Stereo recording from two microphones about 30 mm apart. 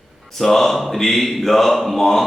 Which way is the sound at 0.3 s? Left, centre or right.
Centre.